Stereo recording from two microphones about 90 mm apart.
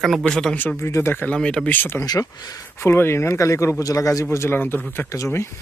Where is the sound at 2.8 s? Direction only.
25° left (ahead or behind).